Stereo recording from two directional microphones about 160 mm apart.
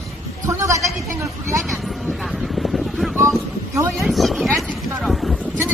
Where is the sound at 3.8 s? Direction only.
15° right (ahead or behind).